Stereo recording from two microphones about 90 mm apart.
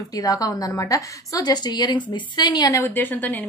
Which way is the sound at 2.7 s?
25° left (ahead or behind).